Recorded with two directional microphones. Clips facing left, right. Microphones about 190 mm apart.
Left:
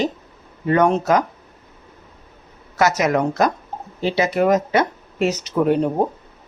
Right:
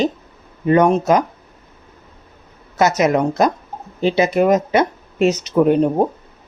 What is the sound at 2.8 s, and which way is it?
Speech, 20° right (ahead or behind).